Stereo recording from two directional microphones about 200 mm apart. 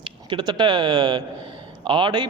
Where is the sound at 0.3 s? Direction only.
20° right (ahead or behind).